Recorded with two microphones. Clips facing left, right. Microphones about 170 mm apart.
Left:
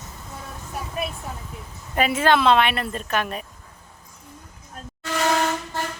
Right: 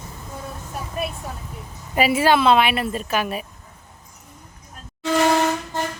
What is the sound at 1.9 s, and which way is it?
Speech, 10° right (ahead or behind).